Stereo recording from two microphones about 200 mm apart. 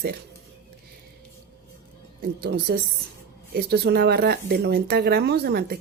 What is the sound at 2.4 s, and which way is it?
Speech, 50° right (ahead or behind).